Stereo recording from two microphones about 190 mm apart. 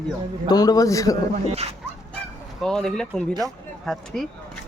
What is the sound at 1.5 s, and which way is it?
Speech, 30° right (ahead or behind).